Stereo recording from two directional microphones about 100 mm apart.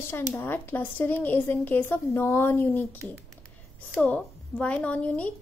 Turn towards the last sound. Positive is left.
turn(degrees=15)  # may be behind; listen again after turning